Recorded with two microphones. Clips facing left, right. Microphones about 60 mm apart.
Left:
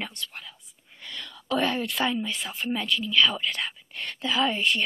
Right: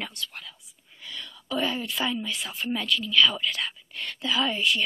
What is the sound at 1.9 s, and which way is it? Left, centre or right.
Speech, centre.